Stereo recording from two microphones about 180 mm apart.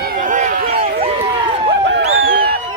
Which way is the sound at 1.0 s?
35° right (ahead or behind).